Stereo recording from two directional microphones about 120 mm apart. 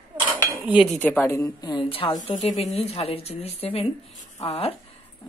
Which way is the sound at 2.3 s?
60° left (ahead or behind).